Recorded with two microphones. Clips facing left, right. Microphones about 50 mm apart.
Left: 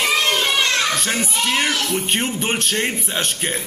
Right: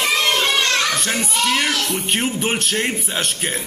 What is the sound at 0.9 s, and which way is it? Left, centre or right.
A man's voice, centre.